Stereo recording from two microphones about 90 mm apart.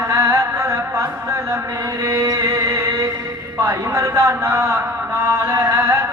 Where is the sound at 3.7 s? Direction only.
35° right (ahead or behind).